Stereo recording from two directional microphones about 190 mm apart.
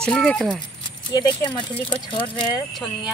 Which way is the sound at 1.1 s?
25° left (ahead or behind).